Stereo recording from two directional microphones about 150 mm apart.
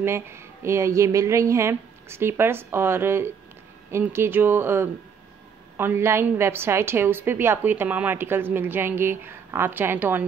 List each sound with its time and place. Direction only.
0.0 s a woman's voice: 15° right (ahead or behind)